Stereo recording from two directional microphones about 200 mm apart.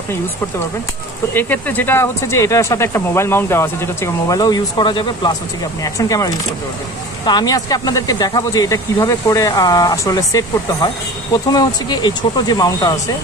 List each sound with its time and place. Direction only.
1.3 s speech: 10° left (ahead or behind)